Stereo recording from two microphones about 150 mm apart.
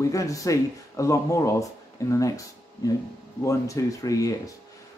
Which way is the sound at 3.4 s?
20° left (ahead or behind).